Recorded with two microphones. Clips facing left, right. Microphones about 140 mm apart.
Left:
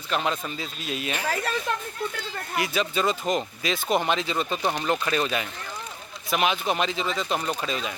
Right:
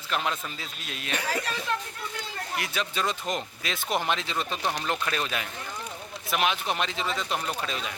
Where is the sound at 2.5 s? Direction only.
Centre (ahead or behind).